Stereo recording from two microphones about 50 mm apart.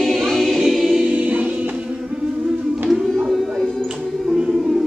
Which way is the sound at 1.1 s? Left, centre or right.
Right.